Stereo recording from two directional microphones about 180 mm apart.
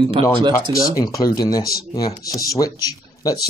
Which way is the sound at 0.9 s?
20° left (ahead or behind).